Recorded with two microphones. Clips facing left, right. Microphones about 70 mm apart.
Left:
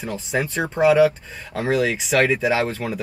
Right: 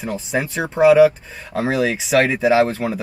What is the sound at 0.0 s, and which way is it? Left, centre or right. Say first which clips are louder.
Speech: right 2 dB; centre.